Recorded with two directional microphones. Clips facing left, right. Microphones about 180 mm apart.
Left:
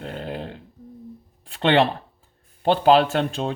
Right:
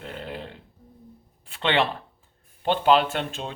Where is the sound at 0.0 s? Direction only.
40° left (ahead or behind).